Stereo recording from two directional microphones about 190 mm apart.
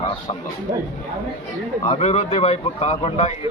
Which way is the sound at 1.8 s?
30° left (ahead or behind).